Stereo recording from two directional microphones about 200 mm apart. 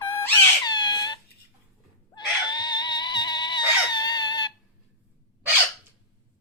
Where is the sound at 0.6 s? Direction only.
20° left (ahead or behind).